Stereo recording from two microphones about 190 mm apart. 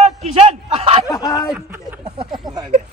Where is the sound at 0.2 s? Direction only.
30° right (ahead or behind).